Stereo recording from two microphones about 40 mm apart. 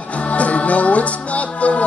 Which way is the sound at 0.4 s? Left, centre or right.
Left.